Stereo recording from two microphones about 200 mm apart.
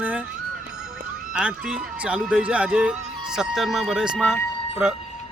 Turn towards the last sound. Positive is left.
turn(degrees=-5)  # may be behind; listen again after turning